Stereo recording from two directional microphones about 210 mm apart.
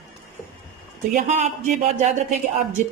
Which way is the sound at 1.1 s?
35° right (ahead or behind).